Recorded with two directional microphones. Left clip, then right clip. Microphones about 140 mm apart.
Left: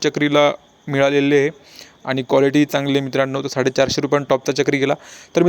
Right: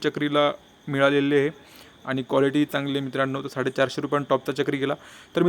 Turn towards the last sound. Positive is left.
turn(degrees=20)  # may be behind; listen again after turning